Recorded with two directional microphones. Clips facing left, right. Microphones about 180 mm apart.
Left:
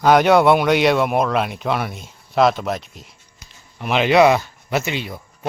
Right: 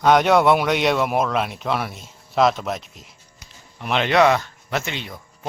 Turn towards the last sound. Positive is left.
turn(degrees=5)  # may be behind; listen again after turning